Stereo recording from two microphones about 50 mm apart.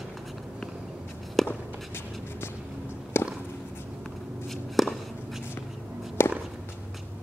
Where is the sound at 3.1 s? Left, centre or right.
Left.